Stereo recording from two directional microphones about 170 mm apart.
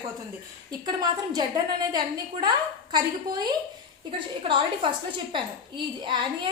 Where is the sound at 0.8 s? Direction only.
25° right (ahead or behind).